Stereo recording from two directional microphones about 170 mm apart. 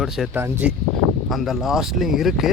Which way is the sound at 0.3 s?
15° right (ahead or behind).